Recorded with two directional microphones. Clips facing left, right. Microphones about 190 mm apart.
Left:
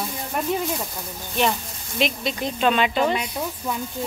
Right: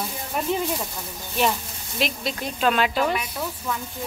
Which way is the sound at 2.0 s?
5° right (ahead or behind).